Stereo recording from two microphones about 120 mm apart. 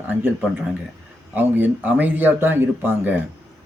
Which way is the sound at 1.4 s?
15° right (ahead or behind).